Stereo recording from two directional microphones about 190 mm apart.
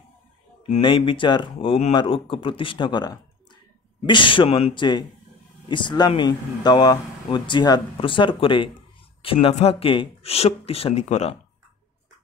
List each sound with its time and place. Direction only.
0.7 s speech: 25° left (ahead or behind)